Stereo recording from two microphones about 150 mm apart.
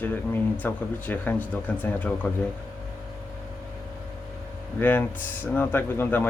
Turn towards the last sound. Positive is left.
turn(degrees=15)  # may be behind; listen again after turning